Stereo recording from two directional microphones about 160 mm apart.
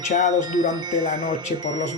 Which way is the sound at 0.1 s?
50° left (ahead or behind).